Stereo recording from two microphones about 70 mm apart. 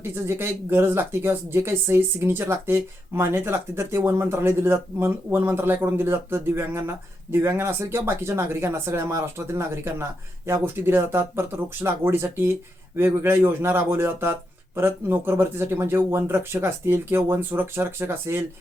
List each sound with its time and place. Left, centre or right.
0.0 s speech: right